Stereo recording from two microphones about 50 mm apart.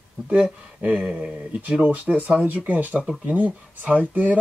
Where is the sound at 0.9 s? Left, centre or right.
Centre.